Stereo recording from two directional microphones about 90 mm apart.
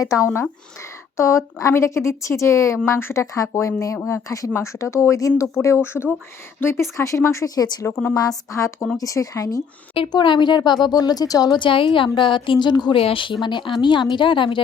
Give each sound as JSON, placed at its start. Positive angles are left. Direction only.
{"t": 0.0, "sound": "a woman's voice", "side_deg": 40}
{"t": 10.1, "sound": "a woman's voice", "side_deg": 55}
{"t": 12.9, "sound": "speech", "side_deg": 80}
{"t": 13.4, "sound": "a woman's voice", "side_deg": 60}